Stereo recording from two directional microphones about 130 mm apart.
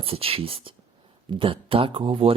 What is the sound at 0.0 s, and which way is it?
Speech, 45° right (ahead or behind).